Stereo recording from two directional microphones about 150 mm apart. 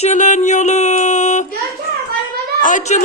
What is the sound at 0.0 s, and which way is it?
Music, 55° left (ahead or behind).